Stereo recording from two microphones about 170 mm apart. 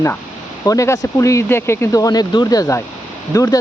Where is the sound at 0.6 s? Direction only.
20° left (ahead or behind).